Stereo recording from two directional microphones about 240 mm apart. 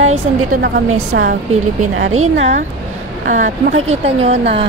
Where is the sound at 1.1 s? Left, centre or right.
Right.